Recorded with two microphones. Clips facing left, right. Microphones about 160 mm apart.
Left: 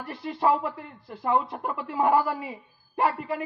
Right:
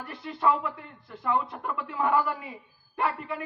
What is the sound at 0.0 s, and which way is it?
Speech, 25° left (ahead or behind).